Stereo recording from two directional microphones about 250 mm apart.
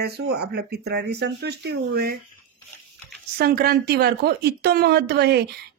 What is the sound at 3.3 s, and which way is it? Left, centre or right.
A woman's voice, right.